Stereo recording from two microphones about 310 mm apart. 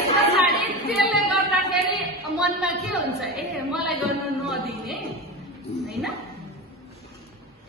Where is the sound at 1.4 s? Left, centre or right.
Right.